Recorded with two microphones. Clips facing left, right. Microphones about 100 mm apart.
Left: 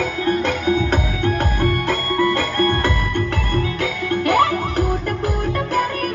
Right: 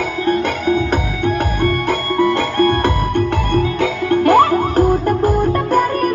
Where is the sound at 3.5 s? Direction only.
30° right (ahead or behind).